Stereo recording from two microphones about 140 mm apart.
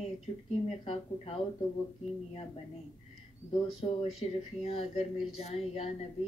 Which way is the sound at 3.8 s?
40° left (ahead or behind).